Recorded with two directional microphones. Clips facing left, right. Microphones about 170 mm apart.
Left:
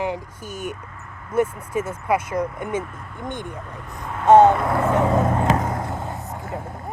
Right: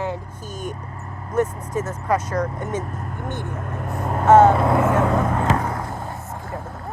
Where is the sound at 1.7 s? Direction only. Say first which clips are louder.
Even; 10° left (ahead or behind).